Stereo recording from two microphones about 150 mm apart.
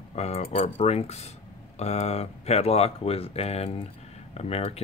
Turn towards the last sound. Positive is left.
turn(degrees=45)  # may be behind; listen again after turning